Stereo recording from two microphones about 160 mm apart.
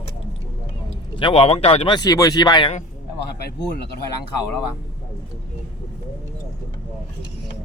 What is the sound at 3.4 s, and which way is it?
Speech, 85° left.